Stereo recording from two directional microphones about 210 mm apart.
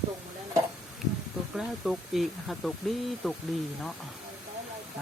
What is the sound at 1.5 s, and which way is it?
Speech, centre (ahead or behind).